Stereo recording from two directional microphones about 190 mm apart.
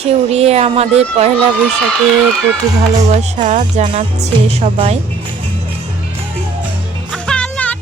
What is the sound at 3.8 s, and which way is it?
Speech, 30° right (ahead or behind).